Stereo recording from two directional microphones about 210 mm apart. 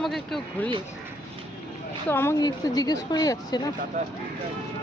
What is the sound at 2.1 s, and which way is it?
A woman's voice, 10° left (ahead or behind).